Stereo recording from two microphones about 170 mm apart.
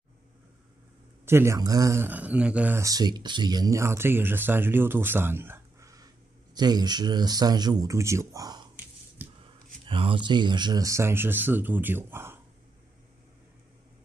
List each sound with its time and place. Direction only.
1.2 s speech: 15° right (ahead or behind)
9.2 s a sound: 10° right (ahead or behind)
9.8 s speech: 30° right (ahead or behind); by 12.4 s 15° right (ahead or behind)